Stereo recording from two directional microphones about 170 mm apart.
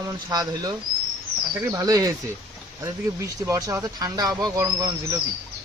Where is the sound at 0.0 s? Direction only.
20° right (ahead or behind).